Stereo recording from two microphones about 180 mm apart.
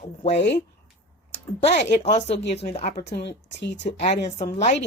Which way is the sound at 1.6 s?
35° left (ahead or behind).